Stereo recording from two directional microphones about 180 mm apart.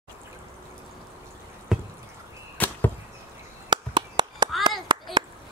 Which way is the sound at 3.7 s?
25° right (ahead or behind).